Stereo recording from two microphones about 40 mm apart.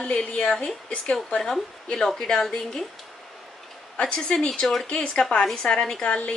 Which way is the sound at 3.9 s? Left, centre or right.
Left.